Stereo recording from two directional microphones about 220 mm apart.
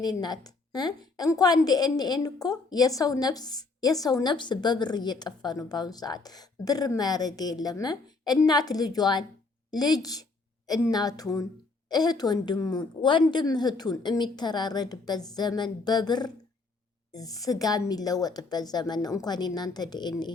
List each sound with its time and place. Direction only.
0.0 s a woman's voice: 20° left (ahead or behind)